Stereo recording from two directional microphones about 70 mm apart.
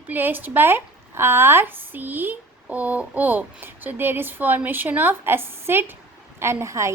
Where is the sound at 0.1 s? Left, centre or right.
Right.